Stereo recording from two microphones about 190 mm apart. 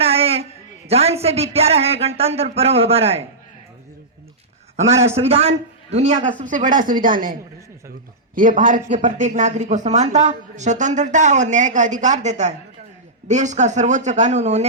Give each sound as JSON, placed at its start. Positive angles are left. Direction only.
{"t": 0.0, "sound": "a sound", "side_deg": -30}
{"t": 0.9, "sound": "speech", "side_deg": -35}
{"t": 4.8, "sound": "a woman's voice", "side_deg": -35}
{"t": 8.4, "sound": "speech", "side_deg": -45}